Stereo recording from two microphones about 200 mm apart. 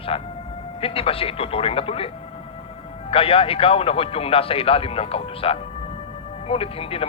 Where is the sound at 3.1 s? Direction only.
30° left (ahead or behind).